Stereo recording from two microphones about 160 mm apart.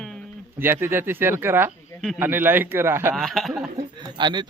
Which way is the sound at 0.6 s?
15° right (ahead or behind).